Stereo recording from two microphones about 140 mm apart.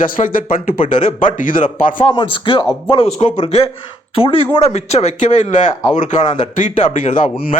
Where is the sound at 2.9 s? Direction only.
45° left (ahead or behind).